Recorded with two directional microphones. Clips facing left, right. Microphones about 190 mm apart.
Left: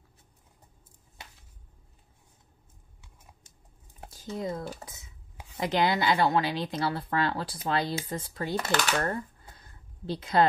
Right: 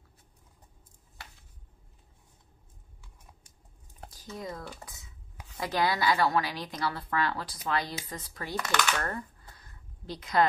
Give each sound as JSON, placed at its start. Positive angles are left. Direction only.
{"t": 4.1, "sound": "speech", "side_deg": 25}